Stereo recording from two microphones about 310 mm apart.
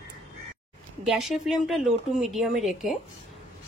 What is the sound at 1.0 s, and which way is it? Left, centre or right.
Speech, centre.